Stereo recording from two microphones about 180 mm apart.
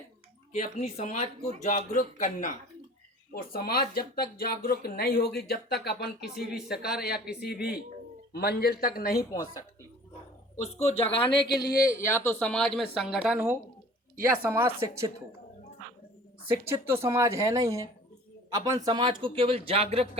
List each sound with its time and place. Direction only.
0.5 s speech: 40° left (ahead or behind)
3.3 s speech: 55° left (ahead or behind)
10.6 s speech: 35° left (ahead or behind)
11.8 s speech: 15° left (ahead or behind); by 15.1 s 15° right (ahead or behind)
16.5 s a man's voice: 15° right (ahead or behind); by 20.1 s 35° right (ahead or behind)